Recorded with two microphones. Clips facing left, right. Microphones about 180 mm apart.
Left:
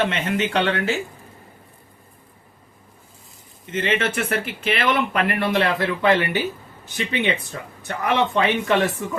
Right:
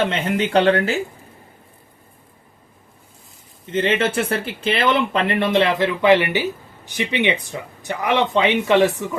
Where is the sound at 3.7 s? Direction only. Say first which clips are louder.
Right 4 dB; 30° right (ahead or behind).